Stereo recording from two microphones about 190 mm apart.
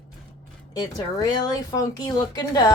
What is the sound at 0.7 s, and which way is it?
Speech, 20° left (ahead or behind).